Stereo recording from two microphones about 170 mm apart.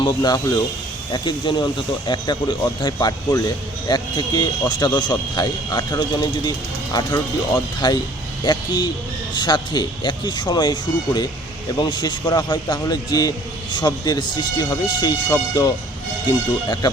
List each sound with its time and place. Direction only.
0.0 s speech: 25° left (ahead or behind)